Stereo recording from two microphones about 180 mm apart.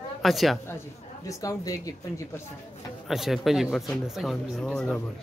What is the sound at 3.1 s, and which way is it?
Speech, centre (ahead or behind).